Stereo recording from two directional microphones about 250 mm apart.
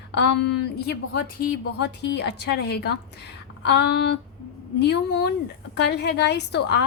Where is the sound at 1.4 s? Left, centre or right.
Left.